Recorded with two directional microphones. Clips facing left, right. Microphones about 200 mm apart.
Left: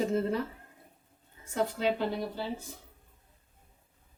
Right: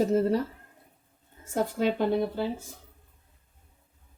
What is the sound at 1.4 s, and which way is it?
A woman's voice, 50° right (ahead or behind).